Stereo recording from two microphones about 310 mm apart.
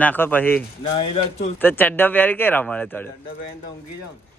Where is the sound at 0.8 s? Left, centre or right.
Centre.